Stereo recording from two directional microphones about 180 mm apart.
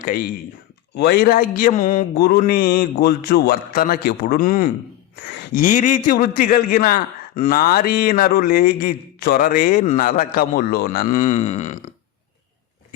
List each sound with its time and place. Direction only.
0.0 s a man's voice: 50° left (ahead or behind)
2.1 s a man's voice: 60° left (ahead or behind); by 11.8 s 40° left (ahead or behind)